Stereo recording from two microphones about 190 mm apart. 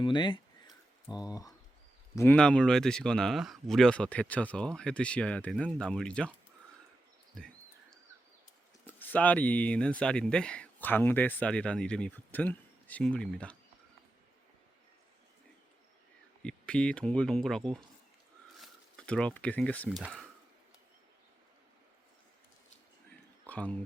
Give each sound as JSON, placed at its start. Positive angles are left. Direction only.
{"t": 0.0, "sound": "speech", "side_deg": 25}
{"t": 2.1, "sound": "speech", "side_deg": 10}
{"t": 7.3, "sound": "a sound", "side_deg": 5}
{"t": 9.0, "sound": "speech", "side_deg": 10}
{"t": 16.4, "sound": "speech", "side_deg": 5}
{"t": 23.5, "sound": "speech", "side_deg": 5}